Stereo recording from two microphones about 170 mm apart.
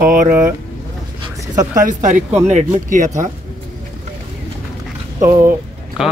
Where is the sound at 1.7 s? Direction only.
50° right (ahead or behind).